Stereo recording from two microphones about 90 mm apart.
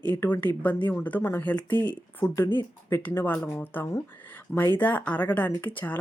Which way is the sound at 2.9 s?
25° left (ahead or behind).